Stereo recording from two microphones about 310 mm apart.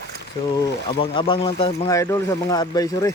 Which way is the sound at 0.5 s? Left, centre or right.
Centre.